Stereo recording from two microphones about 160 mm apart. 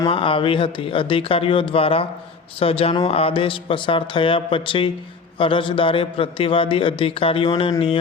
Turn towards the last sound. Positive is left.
turn(degrees=35)  # may be behind; listen again after turning